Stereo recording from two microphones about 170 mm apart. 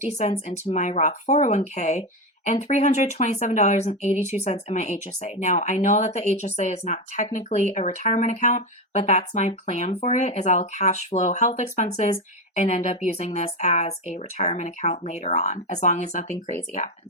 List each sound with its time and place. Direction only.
0.0 s speech: 40° left (ahead or behind)